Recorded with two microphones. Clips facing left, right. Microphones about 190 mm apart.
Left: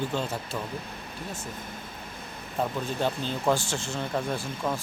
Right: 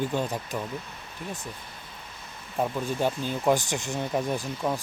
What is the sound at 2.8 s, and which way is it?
Speech, 15° right (ahead or behind).